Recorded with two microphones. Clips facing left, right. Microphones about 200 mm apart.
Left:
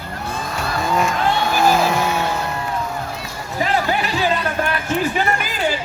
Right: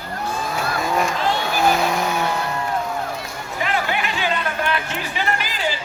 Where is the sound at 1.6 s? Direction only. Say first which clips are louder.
Left 2 dB; centre (ahead or behind).